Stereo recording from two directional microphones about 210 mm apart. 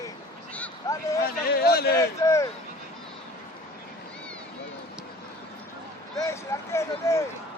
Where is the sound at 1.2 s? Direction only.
45° left (ahead or behind).